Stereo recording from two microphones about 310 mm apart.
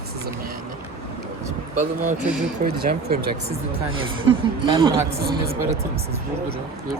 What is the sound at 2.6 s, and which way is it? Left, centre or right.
Speech, right.